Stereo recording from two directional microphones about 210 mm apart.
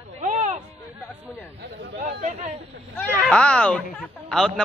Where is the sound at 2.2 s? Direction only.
35° right (ahead or behind).